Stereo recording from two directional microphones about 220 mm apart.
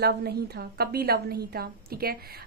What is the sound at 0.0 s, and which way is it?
A woman's voice, 45° right (ahead or behind).